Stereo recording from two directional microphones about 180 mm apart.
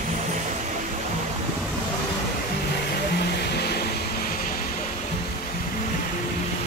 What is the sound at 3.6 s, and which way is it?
Vehicle, 65° left (ahead or behind).